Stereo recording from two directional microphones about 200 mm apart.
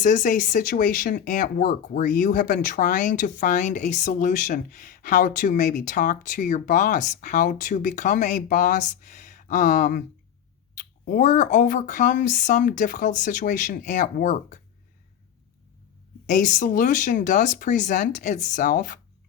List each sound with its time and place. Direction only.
0.0 s speech: 40° left (ahead or behind)
16.2 s speech: 40° left (ahead or behind)